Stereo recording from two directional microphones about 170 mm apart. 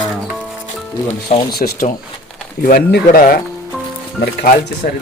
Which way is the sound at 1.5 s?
65° left (ahead or behind).